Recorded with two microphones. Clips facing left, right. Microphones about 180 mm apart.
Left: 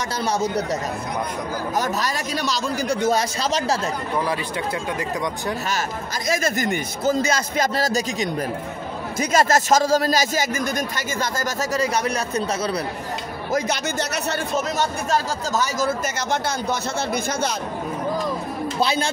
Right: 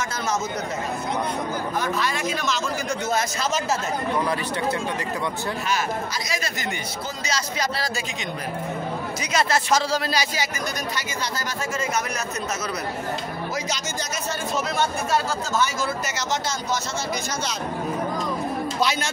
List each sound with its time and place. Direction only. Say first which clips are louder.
1.8 s speech: left 2 dB; 40° left (ahead or behind)
6.2 s a man's voice: left 7 dB; 50° left (ahead or behind)
11.7 s speech: left 5 dB; 35° left (ahead or behind)
15.5 s speech: left 2 dB; 40° left (ahead or behind)
18.8 s speech: left 4 dB; 30° left (ahead or behind)